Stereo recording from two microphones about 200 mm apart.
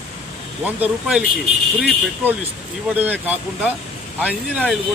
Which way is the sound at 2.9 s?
10° right (ahead or behind).